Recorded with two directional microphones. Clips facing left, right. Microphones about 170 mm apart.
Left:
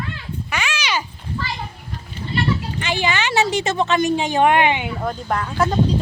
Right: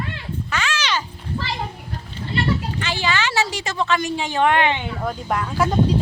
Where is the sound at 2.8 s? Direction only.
15° left (ahead or behind).